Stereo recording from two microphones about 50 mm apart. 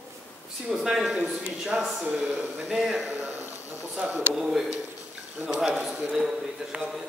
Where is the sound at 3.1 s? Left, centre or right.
Right.